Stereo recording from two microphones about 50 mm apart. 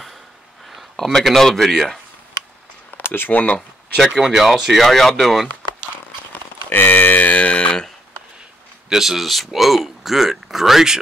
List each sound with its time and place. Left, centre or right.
0.7 s a sound: centre
1.2 s speech: centre
3.1 s speech: left
4.1 s speech: centre
6.3 s a sound: left; by 7.9 s centre
8.8 s speech: centre